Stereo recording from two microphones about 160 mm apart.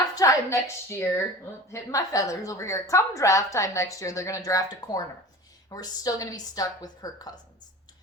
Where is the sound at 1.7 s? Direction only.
20° left (ahead or behind).